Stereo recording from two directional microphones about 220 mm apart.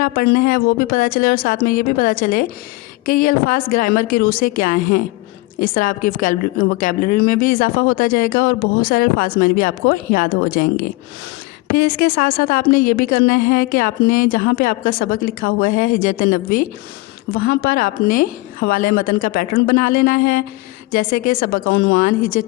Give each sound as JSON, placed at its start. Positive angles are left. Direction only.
{"t": 0.0, "sound": "a woman's voice", "side_deg": 40}
{"t": 11.9, "sound": "a woman's voice", "side_deg": 40}